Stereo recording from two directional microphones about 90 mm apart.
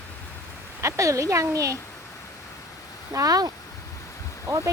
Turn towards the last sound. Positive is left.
turn(degrees=-35)  # may be behind; listen again after turning